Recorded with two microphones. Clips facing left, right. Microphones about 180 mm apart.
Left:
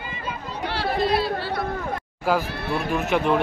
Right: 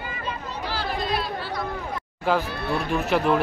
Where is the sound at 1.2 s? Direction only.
65° left (ahead or behind).